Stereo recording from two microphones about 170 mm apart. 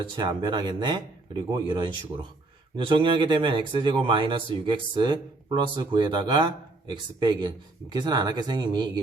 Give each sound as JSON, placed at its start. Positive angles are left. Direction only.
{"t": 0.2, "sound": "speech", "side_deg": -25}